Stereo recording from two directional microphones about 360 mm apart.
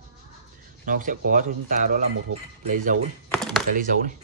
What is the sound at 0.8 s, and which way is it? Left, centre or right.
A man's voice, right.